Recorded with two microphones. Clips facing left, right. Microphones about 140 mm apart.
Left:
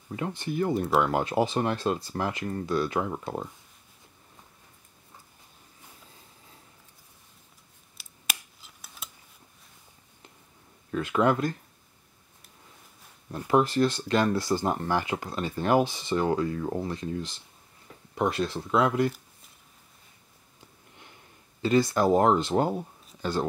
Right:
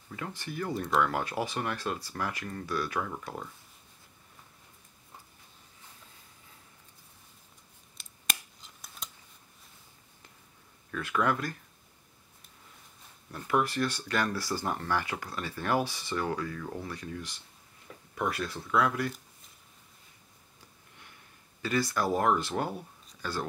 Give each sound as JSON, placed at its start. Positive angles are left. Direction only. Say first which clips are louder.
{"t": 0.1, "sound": "speech", "louder": "left 7 dB", "side_deg": 20}
{"t": 8.0, "sound": "scissors", "louder": "even", "side_deg": 5}
{"t": 10.9, "sound": "speech", "louder": "left 5 dB", "side_deg": 25}
{"t": 13.5, "sound": "speech", "louder": "left 6 dB", "side_deg": 25}
{"t": 21.0, "sound": "speech", "louder": "left 3 dB", "side_deg": 25}